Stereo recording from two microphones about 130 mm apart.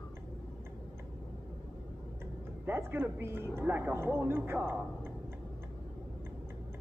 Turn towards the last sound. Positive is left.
turn(degrees=-15)  # may be behind; listen again after turning